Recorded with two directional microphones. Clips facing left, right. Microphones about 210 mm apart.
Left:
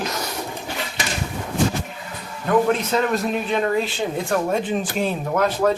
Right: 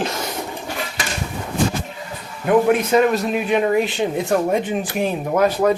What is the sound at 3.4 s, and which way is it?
Speech, 15° right (ahead or behind).